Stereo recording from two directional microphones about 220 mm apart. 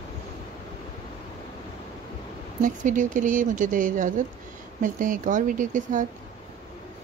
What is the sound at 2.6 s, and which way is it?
Speech, 35° right (ahead or behind).